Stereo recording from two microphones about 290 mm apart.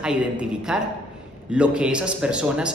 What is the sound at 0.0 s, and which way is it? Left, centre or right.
A woman's voice, centre.